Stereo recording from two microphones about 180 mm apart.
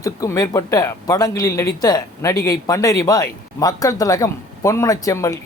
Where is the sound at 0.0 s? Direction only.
20° left (ahead or behind).